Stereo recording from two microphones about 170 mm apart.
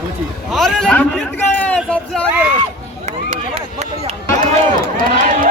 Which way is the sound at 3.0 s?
40° right (ahead or behind).